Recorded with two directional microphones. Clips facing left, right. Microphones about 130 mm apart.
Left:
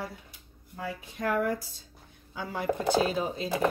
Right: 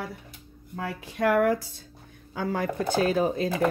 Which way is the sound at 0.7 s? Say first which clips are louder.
Right 3 dB; 80° right.